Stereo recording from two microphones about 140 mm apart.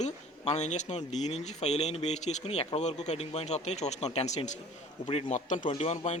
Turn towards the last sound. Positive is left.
turn(degrees=50)  # may be behind; listen again after turning